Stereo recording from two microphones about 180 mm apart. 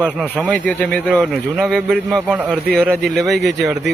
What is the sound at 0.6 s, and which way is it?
Speech, 5° left (ahead or behind).